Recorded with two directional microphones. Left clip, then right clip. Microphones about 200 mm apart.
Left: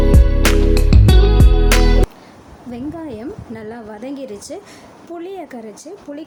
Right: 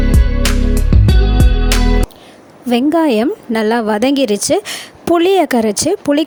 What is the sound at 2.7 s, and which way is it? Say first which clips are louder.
Speech: right 16 dB; 50° right (ahead or behind).